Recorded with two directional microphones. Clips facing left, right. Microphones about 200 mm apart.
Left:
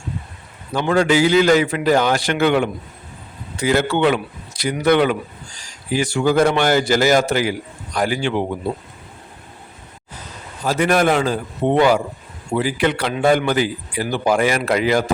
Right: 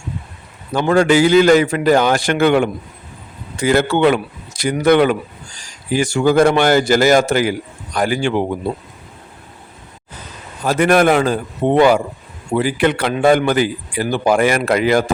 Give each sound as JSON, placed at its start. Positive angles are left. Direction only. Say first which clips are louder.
{"t": 0.7, "sound": "speech", "louder": "right 3 dB", "side_deg": -50}
{"t": 10.7, "sound": "speech", "louder": "right 4 dB", "side_deg": -55}